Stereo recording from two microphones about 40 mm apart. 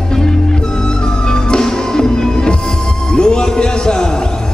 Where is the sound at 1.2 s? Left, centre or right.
Centre.